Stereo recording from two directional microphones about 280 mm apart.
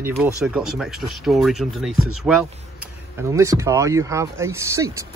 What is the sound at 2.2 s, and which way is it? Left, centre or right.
Speech, centre.